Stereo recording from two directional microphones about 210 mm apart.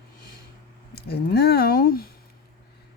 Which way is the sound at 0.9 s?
50° left (ahead or behind).